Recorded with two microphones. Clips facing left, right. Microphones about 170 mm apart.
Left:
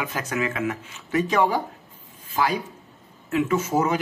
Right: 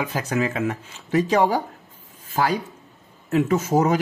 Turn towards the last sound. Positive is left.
turn(degrees=-40)  # may be behind; listen again after turning